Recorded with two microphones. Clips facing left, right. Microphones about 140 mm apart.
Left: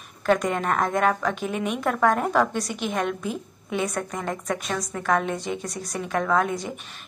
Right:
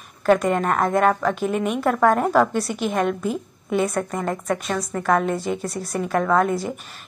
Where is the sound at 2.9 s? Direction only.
5° right (ahead or behind).